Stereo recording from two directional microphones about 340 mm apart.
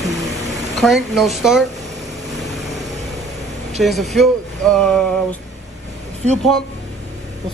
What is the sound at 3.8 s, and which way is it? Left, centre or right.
Speech, centre.